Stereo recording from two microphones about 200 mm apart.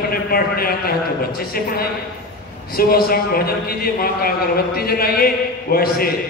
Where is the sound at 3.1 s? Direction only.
50° left (ahead or behind).